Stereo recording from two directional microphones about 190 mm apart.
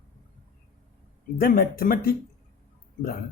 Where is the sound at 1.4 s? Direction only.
50° left (ahead or behind).